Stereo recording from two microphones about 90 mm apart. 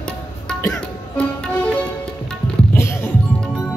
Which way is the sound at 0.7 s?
10° left (ahead or behind).